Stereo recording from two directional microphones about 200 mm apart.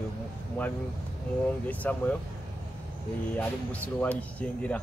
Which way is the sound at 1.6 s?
10° left (ahead or behind).